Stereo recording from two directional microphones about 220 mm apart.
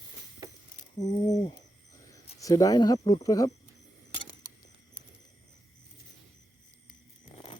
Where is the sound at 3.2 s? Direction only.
15° left (ahead or behind).